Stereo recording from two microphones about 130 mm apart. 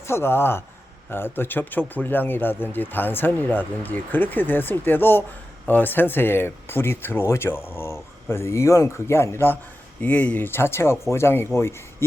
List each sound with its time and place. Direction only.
0.0 s speech: 20° left (ahead or behind)